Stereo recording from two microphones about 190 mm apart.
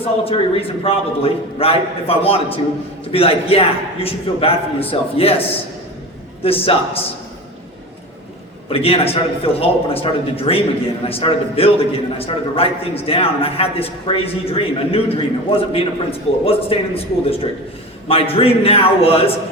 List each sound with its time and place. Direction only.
0.0 s a man's voice: 30° left (ahead or behind)
8.7 s a man's voice: 30° left (ahead or behind)